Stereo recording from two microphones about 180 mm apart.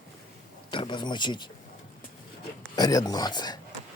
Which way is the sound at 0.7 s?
25° left (ahead or behind).